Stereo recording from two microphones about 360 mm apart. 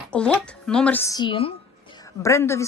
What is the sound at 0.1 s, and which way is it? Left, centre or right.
A woman's voice, centre.